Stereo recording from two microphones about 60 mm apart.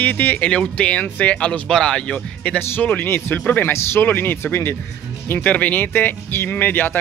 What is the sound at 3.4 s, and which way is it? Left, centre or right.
Speech, left.